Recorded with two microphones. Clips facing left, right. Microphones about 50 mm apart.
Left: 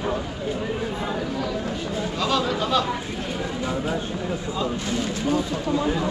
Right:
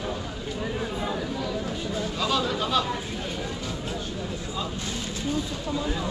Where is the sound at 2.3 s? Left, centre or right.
Centre.